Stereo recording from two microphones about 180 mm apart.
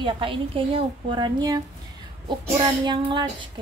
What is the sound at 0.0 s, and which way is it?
A child's voice, 30° right (ahead or behind).